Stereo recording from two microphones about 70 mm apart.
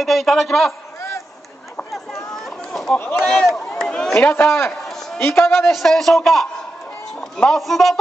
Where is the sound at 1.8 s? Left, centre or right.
Centre.